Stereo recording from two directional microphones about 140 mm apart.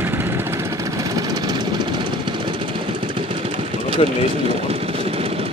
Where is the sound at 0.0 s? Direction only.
15° right (ahead or behind).